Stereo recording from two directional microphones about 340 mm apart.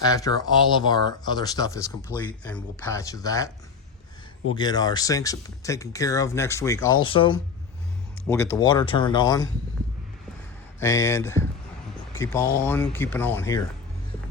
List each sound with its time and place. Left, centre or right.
0.0 s speech: centre
4.5 s speech: centre
10.8 s speech: centre